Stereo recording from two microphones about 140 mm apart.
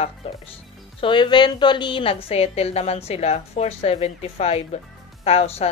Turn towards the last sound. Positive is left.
turn(degrees=45)  # may be behind; listen again after turning